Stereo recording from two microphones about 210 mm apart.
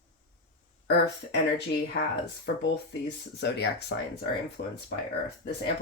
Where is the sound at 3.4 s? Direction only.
55° left (ahead or behind).